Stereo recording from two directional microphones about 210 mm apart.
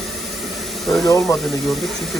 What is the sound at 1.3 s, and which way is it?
Speech, 15° left (ahead or behind).